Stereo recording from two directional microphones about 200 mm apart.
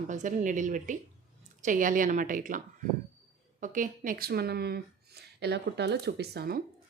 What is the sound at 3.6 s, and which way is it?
A woman's voice, 40° right (ahead or behind).